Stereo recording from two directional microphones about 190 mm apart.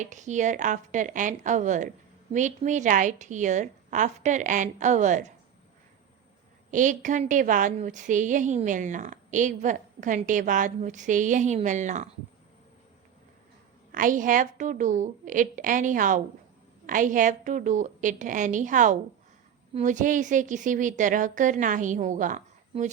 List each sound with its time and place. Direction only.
0.0 s a woman's voice: 40° right (ahead or behind)
6.7 s a woman's voice: 40° right (ahead or behind)
13.9 s a woman's voice: 45° right (ahead or behind)